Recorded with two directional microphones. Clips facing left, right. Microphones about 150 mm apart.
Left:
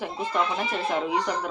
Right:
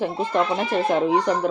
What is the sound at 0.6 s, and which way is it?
Speech, 45° right (ahead or behind).